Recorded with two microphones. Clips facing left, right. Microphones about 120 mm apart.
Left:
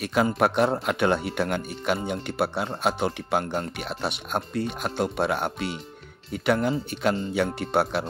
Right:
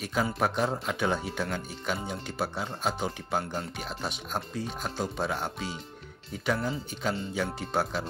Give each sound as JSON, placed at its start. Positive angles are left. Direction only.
{"t": 0.0, "sound": "speech", "side_deg": 70}